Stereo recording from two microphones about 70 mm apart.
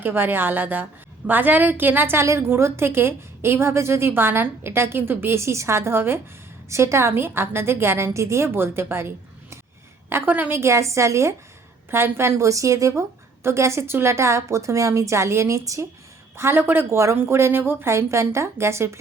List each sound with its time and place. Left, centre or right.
0.0 s a woman's voice: right
10.6 s a woman's voice: right
11.9 s a woman's voice: right
16.4 s a woman's voice: right